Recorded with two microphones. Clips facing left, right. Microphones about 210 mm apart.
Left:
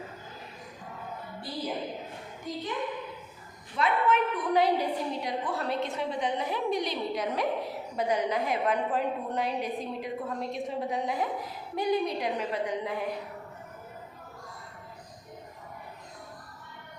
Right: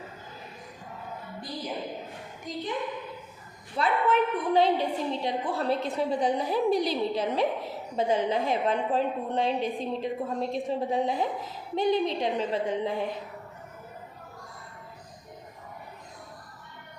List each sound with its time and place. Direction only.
2.5 s a woman's voice: 15° right (ahead or behind)
3.8 s a woman's voice: 30° right (ahead or behind)